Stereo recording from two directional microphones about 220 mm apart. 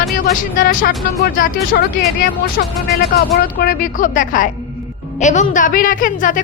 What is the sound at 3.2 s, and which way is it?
A woman's voice, 45° left (ahead or behind).